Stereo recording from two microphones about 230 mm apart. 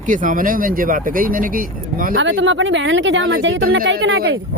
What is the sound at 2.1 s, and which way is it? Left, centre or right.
Speech, right.